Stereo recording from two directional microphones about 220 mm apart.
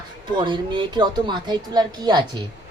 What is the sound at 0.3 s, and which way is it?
A woman's voice, 20° right (ahead or behind).